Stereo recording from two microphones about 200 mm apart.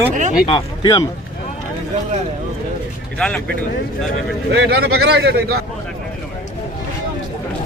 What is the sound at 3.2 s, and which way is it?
Speech, 5° left (ahead or behind).